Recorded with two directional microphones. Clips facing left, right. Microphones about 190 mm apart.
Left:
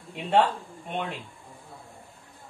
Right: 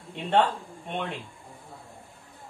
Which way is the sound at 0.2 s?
5° left (ahead or behind).